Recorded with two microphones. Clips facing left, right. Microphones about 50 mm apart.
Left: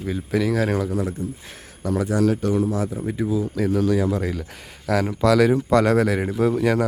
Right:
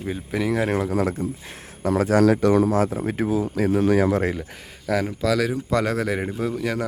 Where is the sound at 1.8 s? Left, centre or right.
Right.